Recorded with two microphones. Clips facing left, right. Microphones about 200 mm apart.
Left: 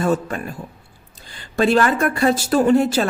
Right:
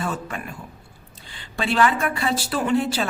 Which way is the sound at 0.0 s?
40° left (ahead or behind).